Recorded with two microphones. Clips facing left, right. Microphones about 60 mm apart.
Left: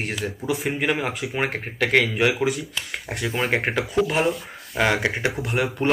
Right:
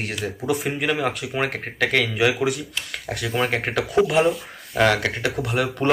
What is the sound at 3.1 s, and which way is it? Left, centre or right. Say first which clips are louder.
Speech: even; left.